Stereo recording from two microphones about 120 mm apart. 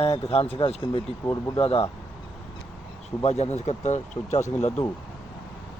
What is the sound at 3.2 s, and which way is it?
Speech, 65° left (ahead or behind).